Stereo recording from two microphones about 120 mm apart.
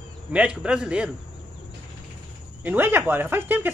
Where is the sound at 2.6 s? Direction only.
15° right (ahead or behind).